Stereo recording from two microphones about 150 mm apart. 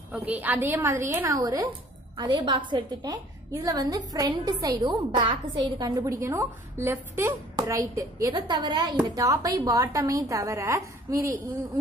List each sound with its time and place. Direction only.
0.1 s a woman's voice: 10° right (ahead or behind)